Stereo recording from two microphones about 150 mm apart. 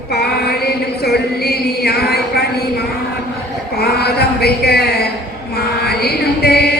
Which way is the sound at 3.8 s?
90° left.